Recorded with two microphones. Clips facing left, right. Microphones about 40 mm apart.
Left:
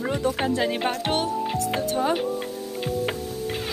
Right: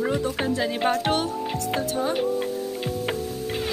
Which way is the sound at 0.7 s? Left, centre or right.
Centre.